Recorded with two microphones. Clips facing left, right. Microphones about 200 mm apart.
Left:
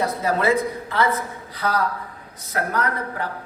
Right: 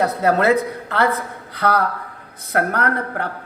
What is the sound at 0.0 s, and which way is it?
A man's voice, 65° right (ahead or behind).